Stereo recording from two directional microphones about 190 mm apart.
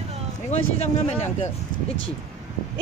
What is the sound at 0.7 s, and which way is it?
Speech, 35° left (ahead or behind).